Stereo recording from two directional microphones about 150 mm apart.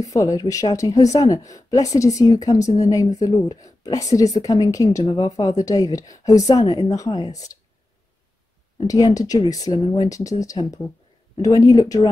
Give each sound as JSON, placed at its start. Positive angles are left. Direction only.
{"t": 0.0, "sound": "speech", "side_deg": 20}
{"t": 8.8, "sound": "speech", "side_deg": 25}